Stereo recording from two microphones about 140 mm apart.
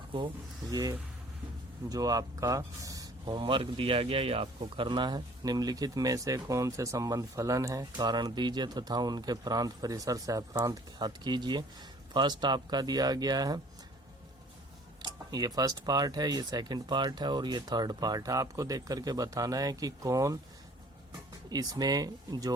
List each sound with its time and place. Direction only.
0.7 s speech: 25° right (ahead or behind)
15.0 s speech: 30° right (ahead or behind)
21.5 s speech: 25° right (ahead or behind)